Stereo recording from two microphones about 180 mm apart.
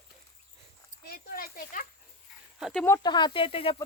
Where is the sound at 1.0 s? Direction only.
55° left (ahead or behind).